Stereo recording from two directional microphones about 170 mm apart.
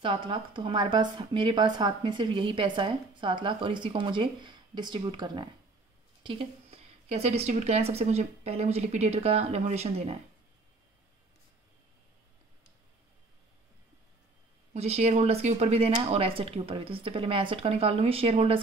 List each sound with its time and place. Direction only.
0.0 s a woman's voice: 30° right (ahead or behind)
14.7 s speech: 40° right (ahead or behind)